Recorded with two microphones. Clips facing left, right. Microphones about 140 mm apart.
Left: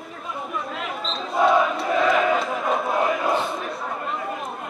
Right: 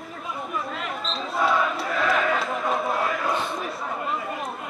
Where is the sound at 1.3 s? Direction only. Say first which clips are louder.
Left 5 dB; 20° left (ahead or behind).